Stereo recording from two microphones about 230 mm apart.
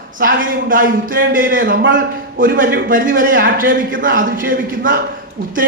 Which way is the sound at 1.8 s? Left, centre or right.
Right.